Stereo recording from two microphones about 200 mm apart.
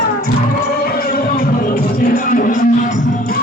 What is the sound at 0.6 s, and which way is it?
Music, 50° left (ahead or behind).